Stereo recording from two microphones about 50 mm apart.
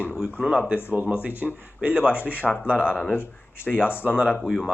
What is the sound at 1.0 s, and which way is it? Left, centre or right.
Speech, right.